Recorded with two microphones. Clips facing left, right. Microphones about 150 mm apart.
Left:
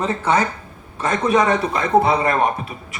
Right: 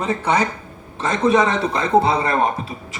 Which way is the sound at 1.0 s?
25° right (ahead or behind).